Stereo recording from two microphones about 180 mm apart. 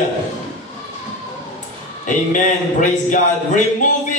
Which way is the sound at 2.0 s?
45° left (ahead or behind).